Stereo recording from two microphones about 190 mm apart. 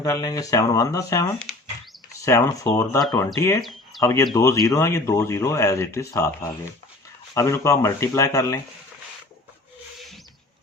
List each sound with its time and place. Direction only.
0.0 s speech: 20° left (ahead or behind)
3.6 s bird: centre (ahead or behind)
4.0 s speech: 20° left (ahead or behind)